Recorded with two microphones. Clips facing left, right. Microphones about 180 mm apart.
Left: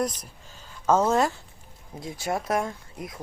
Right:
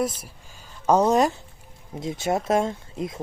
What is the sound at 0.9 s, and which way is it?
Speech, 15° right (ahead or behind).